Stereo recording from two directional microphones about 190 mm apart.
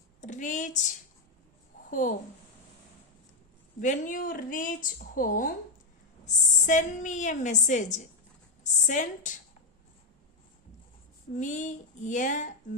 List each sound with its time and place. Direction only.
0.2 s a sound: 40° left (ahead or behind)
1.9 s a woman's voice: 45° left (ahead or behind)
3.8 s a woman's voice: 45° left (ahead or behind)
11.3 s a woman's voice: 40° left (ahead or behind)